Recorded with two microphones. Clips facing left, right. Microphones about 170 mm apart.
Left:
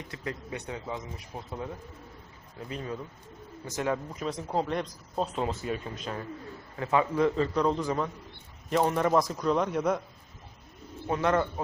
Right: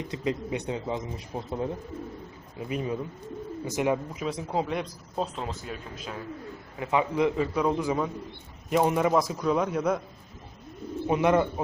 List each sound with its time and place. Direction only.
0.1 s a man's voice: 20° right (ahead or behind)
2.6 s a man's voice: 15° right (ahead or behind)
4.2 s a man's voice: 5° right (ahead or behind)
6.7 s a man's voice: 15° right (ahead or behind)
11.0 s a man's voice: 15° right (ahead or behind)